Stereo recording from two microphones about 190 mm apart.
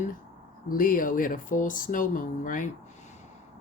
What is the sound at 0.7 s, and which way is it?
Speech, 45° left (ahead or behind).